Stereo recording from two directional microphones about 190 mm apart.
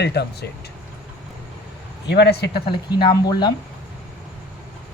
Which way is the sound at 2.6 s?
25° left (ahead or behind).